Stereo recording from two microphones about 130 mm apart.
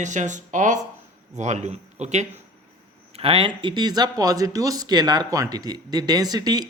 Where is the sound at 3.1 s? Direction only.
50° right (ahead or behind).